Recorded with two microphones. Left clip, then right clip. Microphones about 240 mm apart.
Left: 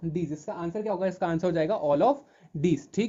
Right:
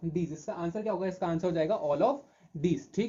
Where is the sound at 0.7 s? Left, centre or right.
Left.